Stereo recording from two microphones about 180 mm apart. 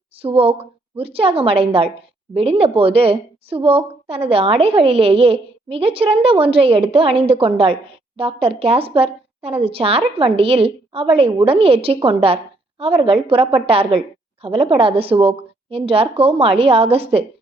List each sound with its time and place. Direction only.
0.2 s a woman's voice: 30° right (ahead or behind)